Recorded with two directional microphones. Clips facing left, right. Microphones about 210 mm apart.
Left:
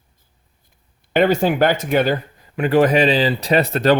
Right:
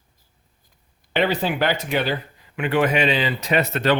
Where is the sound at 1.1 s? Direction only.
45° left (ahead or behind).